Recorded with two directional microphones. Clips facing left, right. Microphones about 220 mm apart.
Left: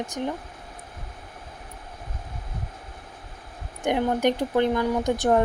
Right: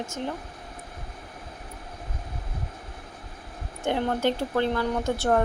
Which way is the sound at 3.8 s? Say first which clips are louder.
Left 3 dB; 15° left (ahead or behind).